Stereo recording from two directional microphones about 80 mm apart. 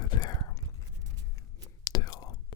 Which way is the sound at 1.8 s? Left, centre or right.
Left.